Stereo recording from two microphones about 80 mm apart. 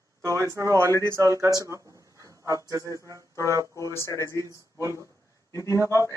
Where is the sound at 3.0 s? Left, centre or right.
Left.